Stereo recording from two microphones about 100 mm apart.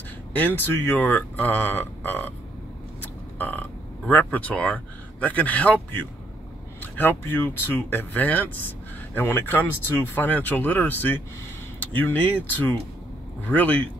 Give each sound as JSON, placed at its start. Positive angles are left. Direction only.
{"t": 0.3, "sound": "speech", "side_deg": 20}